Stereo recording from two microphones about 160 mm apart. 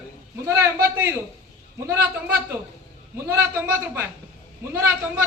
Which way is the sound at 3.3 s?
15° right (ahead or behind).